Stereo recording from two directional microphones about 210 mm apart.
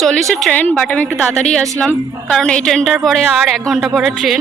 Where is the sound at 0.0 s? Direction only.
Centre (ahead or behind).